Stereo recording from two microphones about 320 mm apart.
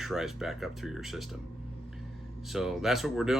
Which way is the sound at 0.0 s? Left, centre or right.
Centre.